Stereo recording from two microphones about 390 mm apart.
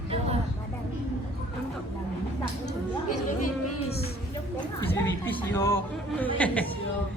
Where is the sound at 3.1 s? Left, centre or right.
Left.